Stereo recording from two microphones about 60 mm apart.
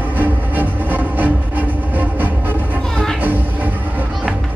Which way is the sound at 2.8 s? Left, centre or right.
Centre.